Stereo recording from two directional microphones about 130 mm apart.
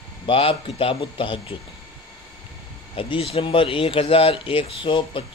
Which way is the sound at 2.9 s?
45° left (ahead or behind).